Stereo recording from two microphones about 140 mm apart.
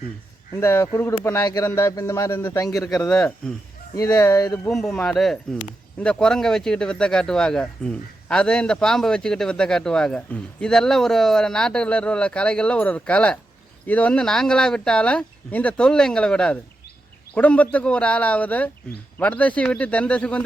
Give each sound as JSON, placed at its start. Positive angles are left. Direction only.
{"t": 0.5, "sound": "a man's voice", "side_deg": 15}
{"t": 3.1, "sound": "a man's voice", "side_deg": 5}
{"t": 3.9, "sound": "a man's voice", "side_deg": 25}
{"t": 4.7, "sound": "a man's voice", "side_deg": 5}